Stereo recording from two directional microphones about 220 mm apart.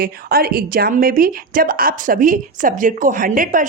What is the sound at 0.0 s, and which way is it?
A woman's voice, 45° right (ahead or behind).